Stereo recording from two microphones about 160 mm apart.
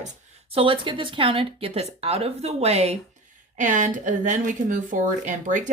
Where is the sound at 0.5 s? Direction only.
35° right (ahead or behind).